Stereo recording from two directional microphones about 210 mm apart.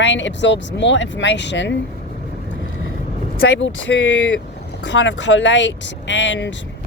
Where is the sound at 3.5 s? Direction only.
60° left (ahead or behind).